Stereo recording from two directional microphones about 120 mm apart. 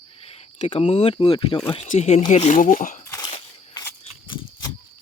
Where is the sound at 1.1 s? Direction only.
45° left (ahead or behind).